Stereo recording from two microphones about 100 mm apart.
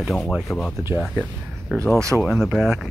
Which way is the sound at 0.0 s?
5° left (ahead or behind).